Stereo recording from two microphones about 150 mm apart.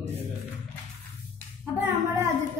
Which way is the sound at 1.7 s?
20° right (ahead or behind).